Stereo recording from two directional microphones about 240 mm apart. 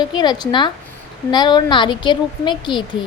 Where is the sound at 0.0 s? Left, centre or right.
Centre.